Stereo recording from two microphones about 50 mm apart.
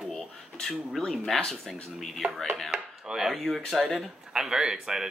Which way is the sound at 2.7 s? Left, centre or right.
Centre.